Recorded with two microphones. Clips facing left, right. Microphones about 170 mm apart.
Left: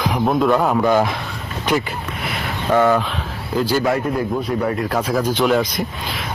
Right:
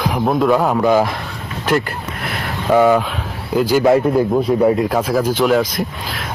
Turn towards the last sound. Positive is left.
turn(degrees=0)  # may be behind; listen again after turning